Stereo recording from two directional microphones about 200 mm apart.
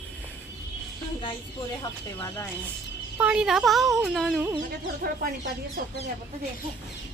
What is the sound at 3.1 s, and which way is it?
Speech, 5° right (ahead or behind).